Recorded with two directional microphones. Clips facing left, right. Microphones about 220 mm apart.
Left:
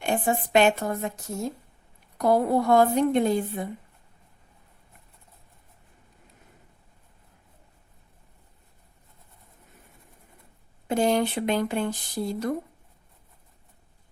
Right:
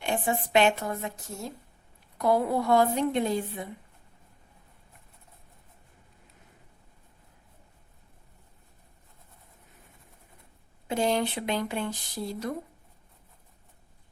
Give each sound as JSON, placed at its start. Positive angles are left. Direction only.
{"t": 0.0, "sound": "speech", "side_deg": 45}
{"t": 2.1, "sound": "speech", "side_deg": 45}
{"t": 10.8, "sound": "speech", "side_deg": 45}